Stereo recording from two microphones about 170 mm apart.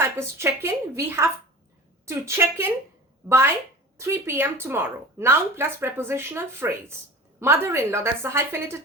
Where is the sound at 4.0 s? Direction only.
15° right (ahead or behind).